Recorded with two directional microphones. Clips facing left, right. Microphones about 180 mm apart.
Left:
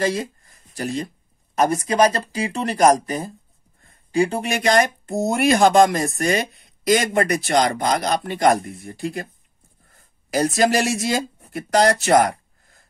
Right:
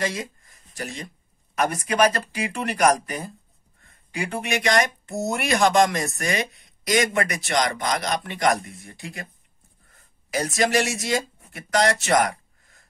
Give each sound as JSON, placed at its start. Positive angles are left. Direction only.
{"t": 0.0, "sound": "speech", "side_deg": 35}
{"t": 10.3, "sound": "speech", "side_deg": 35}